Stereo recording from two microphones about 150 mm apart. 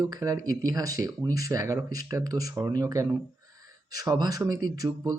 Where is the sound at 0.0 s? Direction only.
25° right (ahead or behind).